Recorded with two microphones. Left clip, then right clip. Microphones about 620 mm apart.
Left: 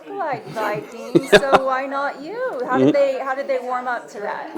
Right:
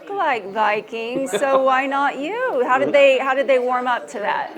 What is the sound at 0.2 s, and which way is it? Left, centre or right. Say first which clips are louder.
A woman's voice: right 5 dB; right.